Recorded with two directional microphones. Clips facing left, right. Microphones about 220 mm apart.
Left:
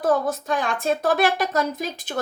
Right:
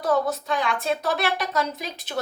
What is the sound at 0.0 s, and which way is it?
A woman's voice, 45° left (ahead or behind).